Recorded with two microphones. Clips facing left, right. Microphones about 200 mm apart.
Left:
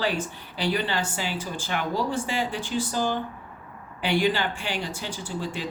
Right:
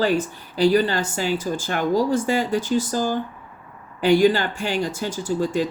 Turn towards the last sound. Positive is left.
turn(degrees=-40)  # may be behind; listen again after turning